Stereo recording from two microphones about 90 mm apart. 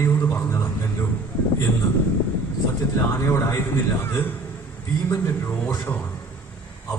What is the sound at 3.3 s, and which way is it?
A man's voice, 30° left (ahead or behind).